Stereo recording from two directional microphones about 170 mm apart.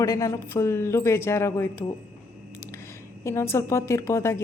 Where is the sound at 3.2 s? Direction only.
15° left (ahead or behind).